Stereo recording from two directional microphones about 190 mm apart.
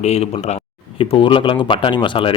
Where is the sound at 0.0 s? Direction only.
35° left (ahead or behind).